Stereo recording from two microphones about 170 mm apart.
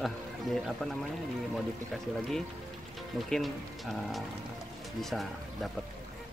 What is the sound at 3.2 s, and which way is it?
Speech, centre (ahead or behind).